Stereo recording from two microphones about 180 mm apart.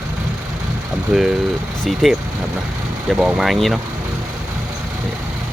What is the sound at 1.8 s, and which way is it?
Speech, centre (ahead or behind).